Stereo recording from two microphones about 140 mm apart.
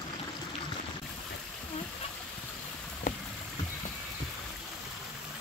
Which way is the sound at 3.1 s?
80° left.